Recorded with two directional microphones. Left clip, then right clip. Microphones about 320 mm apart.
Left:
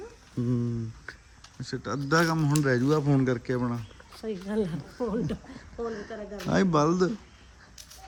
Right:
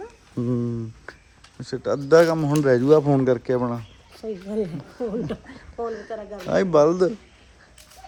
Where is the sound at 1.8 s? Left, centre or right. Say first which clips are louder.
Right 10 dB; centre.